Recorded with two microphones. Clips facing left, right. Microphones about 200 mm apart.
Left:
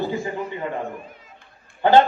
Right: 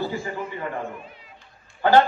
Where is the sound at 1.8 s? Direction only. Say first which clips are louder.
Left 2 dB; 20° left (ahead or behind).